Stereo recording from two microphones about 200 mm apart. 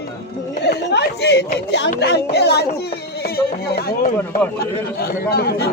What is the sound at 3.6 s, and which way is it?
Speech, 50° left (ahead or behind).